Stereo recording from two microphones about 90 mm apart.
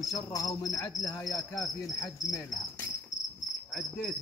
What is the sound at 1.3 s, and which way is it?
Cricket, 40° left (ahead or behind).